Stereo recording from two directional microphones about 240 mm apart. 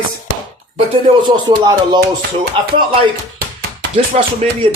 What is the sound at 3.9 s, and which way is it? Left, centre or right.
Speech, right.